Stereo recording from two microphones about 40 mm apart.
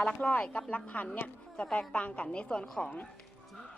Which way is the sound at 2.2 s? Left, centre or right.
Left.